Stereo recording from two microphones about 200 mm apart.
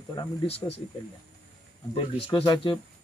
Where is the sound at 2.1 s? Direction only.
30° left (ahead or behind).